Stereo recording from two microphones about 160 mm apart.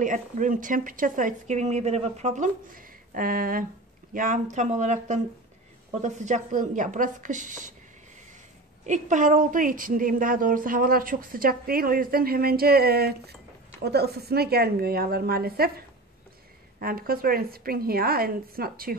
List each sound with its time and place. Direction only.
0.0 s a woman's voice: 55° right (ahead or behind)
8.8 s a woman's voice: 50° right (ahead or behind); by 15.7 s 70° right (ahead or behind)
16.8 s a woman's voice: 70° right (ahead or behind)